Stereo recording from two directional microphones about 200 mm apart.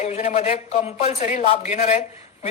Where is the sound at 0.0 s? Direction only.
35° left (ahead or behind).